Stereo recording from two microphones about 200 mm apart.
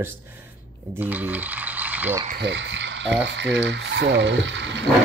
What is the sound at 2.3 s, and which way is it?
Speech, 60° right (ahead or behind).